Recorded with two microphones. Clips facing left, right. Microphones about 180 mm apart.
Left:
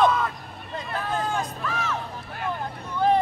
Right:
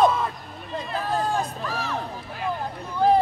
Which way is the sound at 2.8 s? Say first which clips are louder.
Right 2 dB; 35° right (ahead or behind).